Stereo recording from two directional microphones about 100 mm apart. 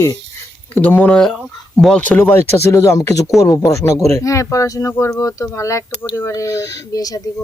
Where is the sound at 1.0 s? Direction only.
5° left (ahead or behind); by 6.3 s 25° left (ahead or behind).